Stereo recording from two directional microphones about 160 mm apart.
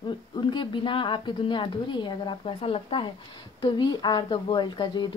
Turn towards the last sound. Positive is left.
turn(degrees=30)  # may be behind; listen again after turning